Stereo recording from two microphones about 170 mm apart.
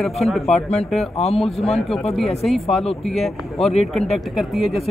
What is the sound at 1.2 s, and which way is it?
Speech, 35° left (ahead or behind).